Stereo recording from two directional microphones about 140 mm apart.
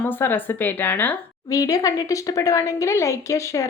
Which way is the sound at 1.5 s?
25° left (ahead or behind).